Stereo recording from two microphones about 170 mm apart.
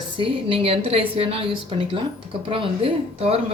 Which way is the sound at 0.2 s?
30° right (ahead or behind).